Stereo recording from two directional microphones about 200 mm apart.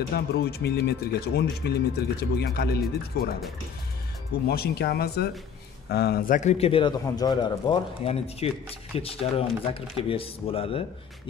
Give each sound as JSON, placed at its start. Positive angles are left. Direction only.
{"t": 0.1, "sound": "speech", "side_deg": 55}
{"t": 4.5, "sound": "a man's voice", "side_deg": 55}